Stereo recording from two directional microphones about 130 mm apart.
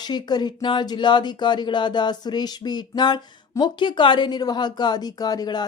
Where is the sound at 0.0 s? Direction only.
35° left (ahead or behind).